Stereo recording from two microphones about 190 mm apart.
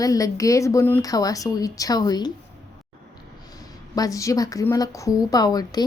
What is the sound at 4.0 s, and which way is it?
Speech, 15° left (ahead or behind).